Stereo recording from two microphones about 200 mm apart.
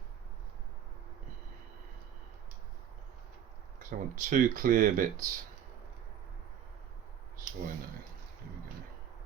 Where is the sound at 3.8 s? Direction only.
40° right (ahead or behind).